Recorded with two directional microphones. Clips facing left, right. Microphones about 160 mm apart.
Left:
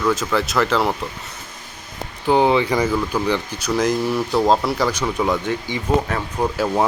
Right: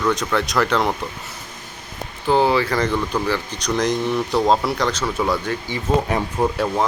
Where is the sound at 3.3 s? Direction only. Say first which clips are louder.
Left 2 dB; 15° left (ahead or behind).